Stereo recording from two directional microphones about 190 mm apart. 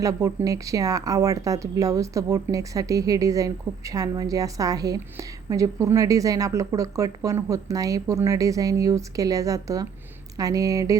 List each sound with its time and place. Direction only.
0.0 s speech: 20° right (ahead or behind)